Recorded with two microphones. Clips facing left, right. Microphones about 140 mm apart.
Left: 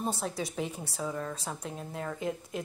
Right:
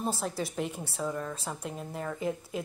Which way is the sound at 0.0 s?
Centre (ahead or behind).